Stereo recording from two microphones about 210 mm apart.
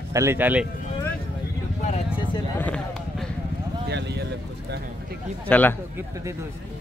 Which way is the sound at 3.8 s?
55° right (ahead or behind).